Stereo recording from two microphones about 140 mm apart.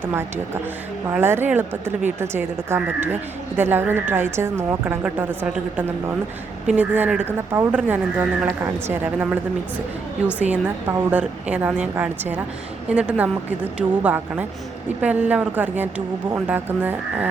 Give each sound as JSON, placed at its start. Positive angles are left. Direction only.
{"t": 0.0, "sound": "speech", "side_deg": -15}